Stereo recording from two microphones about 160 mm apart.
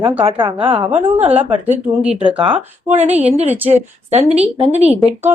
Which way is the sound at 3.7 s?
40° right (ahead or behind).